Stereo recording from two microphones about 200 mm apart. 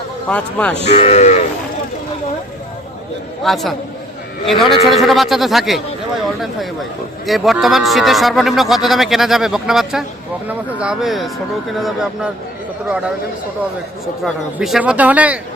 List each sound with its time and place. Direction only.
0.3 s speech: 5° left (ahead or behind)
0.9 s speech: 35° left (ahead or behind)
3.4 s speech: centre (ahead or behind)
4.9 s speech: centre (ahead or behind)
14.3 s a man's voice: centre (ahead or behind)